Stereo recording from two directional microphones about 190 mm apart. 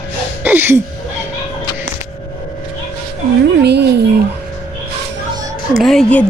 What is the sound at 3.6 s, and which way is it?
Speech, 60° right (ahead or behind).